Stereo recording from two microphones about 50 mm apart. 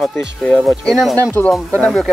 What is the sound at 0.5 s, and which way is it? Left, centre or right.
Speech, centre.